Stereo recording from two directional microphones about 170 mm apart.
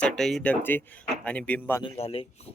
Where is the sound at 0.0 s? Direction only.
5° left (ahead or behind).